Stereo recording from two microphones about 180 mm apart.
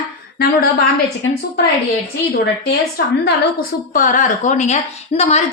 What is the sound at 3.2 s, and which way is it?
A woman's voice, 55° left (ahead or behind).